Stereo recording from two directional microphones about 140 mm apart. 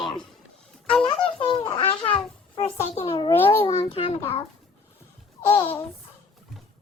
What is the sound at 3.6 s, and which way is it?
Speech, 40° left (ahead or behind).